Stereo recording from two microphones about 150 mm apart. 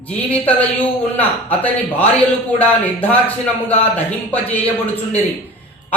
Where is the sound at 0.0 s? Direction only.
10° left (ahead or behind).